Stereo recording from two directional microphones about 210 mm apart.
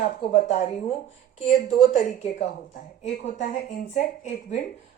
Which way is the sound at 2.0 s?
30° left (ahead or behind).